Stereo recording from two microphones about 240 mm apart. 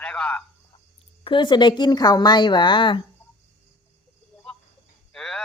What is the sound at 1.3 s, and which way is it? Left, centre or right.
Speech, centre.